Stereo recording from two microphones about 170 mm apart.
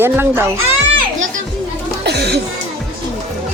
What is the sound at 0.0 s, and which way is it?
Speech, 15° right (ahead or behind).